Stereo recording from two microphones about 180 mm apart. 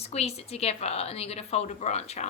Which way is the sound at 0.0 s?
35° left (ahead or behind).